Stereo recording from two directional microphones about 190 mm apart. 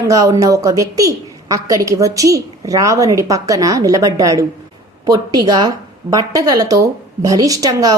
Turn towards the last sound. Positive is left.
turn(degrees=-20)  # may be behind; listen again after turning